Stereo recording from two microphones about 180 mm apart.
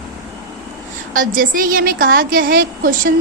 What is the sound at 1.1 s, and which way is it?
A woman's voice, 50° right (ahead or behind).